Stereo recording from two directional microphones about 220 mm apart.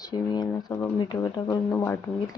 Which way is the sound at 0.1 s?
15° left (ahead or behind).